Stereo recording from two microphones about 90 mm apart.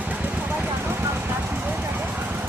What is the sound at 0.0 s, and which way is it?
Vehicle, 15° right (ahead or behind).